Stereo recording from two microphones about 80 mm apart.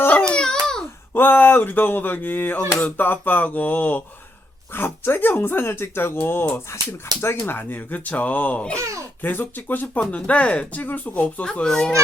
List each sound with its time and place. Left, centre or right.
0.0 s babbling: centre
1.1 s speech: left